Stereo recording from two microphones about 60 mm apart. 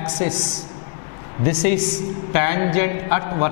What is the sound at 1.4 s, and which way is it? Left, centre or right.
A man's voice, centre.